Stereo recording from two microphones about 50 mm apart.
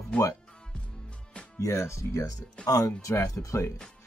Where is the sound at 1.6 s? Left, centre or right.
Left.